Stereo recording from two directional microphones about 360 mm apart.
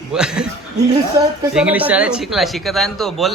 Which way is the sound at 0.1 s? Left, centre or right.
Centre.